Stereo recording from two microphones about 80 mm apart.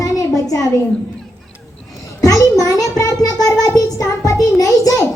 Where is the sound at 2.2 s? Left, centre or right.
Left.